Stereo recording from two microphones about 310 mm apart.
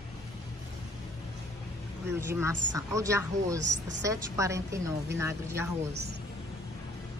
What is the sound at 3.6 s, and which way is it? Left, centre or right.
Speech, right.